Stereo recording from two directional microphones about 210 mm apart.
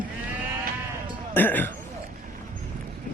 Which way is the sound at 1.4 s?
10° left (ahead or behind).